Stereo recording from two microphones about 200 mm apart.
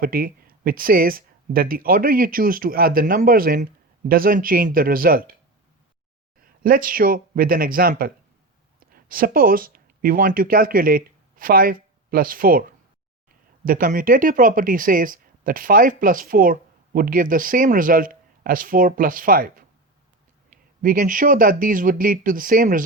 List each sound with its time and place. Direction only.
0.0 s speech: 45° right (ahead or behind)
6.4 s speech: 45° right (ahead or behind)
13.7 s speech: 45° right (ahead or behind)